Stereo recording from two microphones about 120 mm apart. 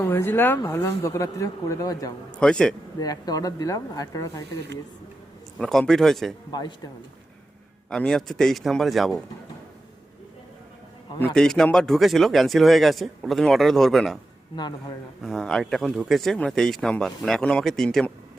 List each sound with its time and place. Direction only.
0.0 s speech: 20° left (ahead or behind)
2.4 s speech: 5° left (ahead or behind)
3.0 s speech: 30° left (ahead or behind)
5.5 s speech: 5° left (ahead or behind)
6.5 s speech: 35° left (ahead or behind)
7.9 s speech: 5° left (ahead or behind)
11.3 s speech: 5° left (ahead or behind)
15.2 s speech: 5° left (ahead or behind)